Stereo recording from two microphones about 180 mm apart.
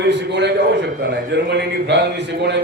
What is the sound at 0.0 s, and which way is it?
A man's voice, 75° right (ahead or behind).